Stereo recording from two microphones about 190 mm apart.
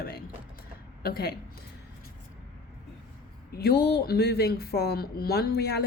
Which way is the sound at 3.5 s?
55° left (ahead or behind).